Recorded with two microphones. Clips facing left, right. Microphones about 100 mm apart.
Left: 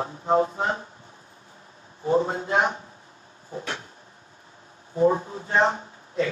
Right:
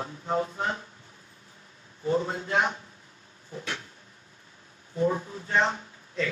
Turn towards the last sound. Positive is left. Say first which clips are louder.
# left 5 dB
turn(degrees=30)  # may be behind; listen again after turning